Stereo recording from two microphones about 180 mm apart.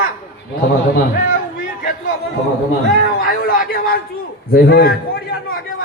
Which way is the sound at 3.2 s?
55° left (ahead or behind).